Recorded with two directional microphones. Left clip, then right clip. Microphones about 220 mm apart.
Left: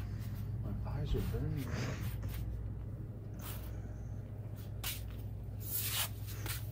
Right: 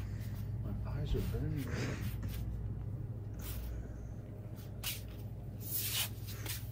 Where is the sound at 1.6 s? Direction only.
15° left (ahead or behind).